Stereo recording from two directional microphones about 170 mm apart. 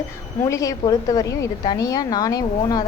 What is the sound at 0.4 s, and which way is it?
A woman's voice, 20° left (ahead or behind).